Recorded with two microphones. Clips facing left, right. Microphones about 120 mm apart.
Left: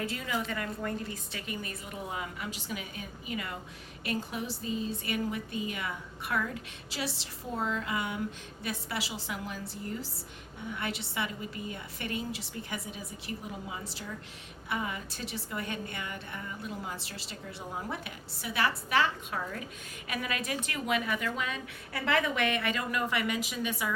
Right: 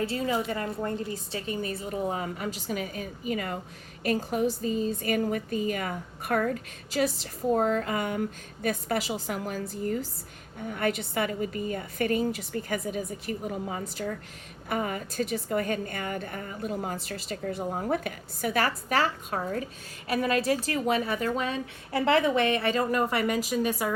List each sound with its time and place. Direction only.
0.0 s a woman's voice: 30° right (ahead or behind)